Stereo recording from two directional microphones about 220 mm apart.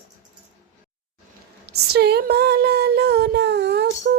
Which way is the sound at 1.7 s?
45° right (ahead or behind).